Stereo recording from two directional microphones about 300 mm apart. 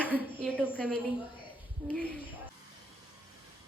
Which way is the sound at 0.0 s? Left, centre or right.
Centre.